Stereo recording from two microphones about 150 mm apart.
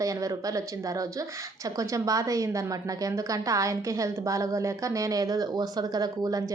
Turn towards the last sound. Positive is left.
turn(degrees=-25)  # may be behind; listen again after turning